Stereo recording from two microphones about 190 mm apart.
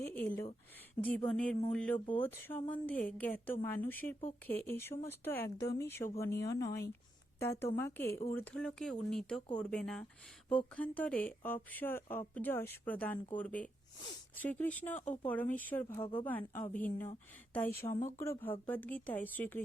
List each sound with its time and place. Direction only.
0.0 s a sound: 10° left (ahead or behind)
1.0 s speech: 5° left (ahead or behind)
14.9 s speech: 40° left (ahead or behind)
15.3 s speech: 10° left (ahead or behind)
17.8 s speech: 25° left (ahead or behind)
18.2 s speech: 10° left (ahead or behind)